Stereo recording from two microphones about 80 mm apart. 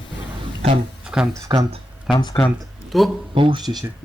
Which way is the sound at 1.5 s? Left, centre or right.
Right.